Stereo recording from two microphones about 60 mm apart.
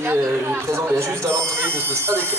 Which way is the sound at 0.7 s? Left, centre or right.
Right.